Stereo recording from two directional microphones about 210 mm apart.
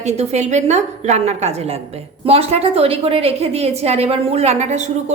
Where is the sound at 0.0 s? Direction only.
30° right (ahead or behind).